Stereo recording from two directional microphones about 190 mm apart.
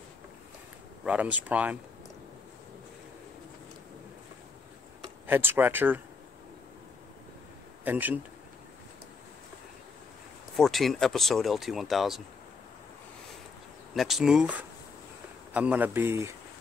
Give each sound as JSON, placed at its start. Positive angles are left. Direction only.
{"t": 1.0, "sound": "speech", "side_deg": -5}
{"t": 5.2, "sound": "speech", "side_deg": -10}
{"t": 7.8, "sound": "speech", "side_deg": -10}
{"t": 10.5, "sound": "speech", "side_deg": 0}
{"t": 13.9, "sound": "speech", "side_deg": 0}